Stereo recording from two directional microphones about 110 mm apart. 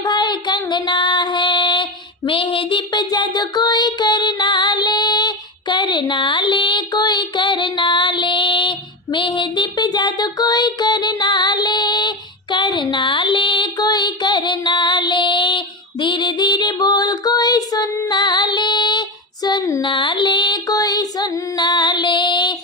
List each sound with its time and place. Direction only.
0.0 s child singing: 40° left (ahead or behind)
0.7 s female singing: 45° left (ahead or behind)
19.8 s music: 45° left (ahead or behind)